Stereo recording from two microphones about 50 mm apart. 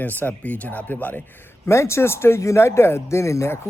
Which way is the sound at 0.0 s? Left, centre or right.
Left.